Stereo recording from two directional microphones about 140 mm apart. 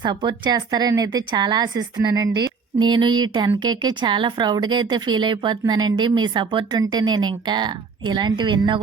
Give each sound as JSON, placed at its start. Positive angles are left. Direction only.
{"t": 0.0, "sound": "speech", "side_deg": -35}